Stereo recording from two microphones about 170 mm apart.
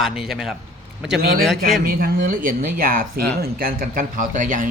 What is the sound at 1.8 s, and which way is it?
Speech, 60° right (ahead or behind).